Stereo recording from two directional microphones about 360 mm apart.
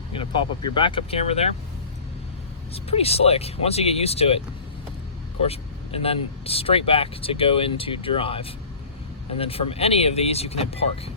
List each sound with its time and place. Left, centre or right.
0.1 s speech: centre
2.7 s speech: centre
5.4 s speech: centre